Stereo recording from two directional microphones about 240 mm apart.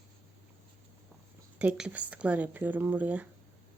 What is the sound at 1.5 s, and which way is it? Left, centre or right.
Speech, centre.